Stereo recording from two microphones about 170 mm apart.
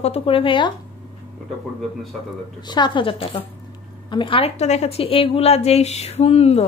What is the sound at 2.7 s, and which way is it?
A woman's voice, 30° left (ahead or behind).